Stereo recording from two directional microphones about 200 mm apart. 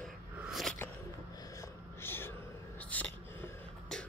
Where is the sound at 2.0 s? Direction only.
10° left (ahead or behind).